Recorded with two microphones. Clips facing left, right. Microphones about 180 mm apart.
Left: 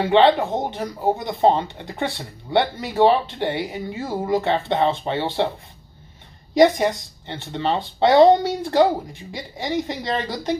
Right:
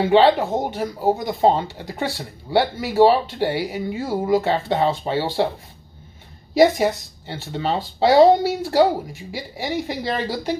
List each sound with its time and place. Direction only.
0.1 s speech: 5° right (ahead or behind)
6.5 s speech: 5° right (ahead or behind)